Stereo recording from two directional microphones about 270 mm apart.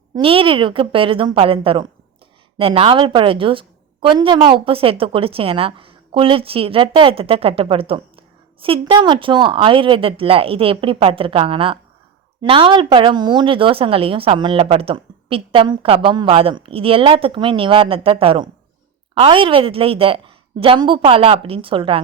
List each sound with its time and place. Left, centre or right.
0.1 s speech: centre